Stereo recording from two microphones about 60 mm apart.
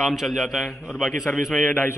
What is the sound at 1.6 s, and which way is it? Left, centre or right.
Speech, left.